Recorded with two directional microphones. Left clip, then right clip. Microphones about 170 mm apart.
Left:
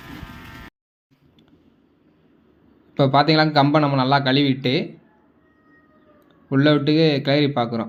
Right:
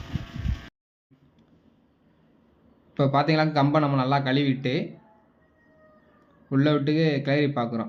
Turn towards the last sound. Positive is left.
turn(degrees=10)  # may be behind; listen again after turning